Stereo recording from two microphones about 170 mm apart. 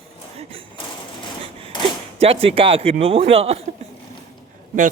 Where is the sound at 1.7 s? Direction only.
25° left (ahead or behind).